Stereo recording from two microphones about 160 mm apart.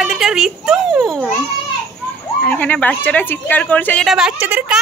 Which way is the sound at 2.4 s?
10° left (ahead or behind).